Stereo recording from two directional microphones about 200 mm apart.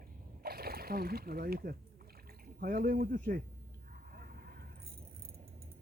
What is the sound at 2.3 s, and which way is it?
Speech, 50° right (ahead or behind).